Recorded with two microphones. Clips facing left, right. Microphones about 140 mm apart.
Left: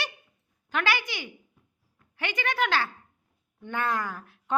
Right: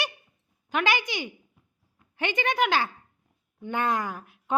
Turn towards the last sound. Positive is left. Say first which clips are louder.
# right 2 dB
turn(degrees=-15)  # may be behind; listen again after turning